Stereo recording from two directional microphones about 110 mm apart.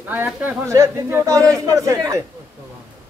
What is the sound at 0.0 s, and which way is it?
Speech, 15° right (ahead or behind).